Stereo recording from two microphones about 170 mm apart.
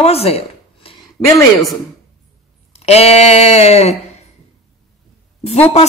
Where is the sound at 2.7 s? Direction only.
35° left (ahead or behind).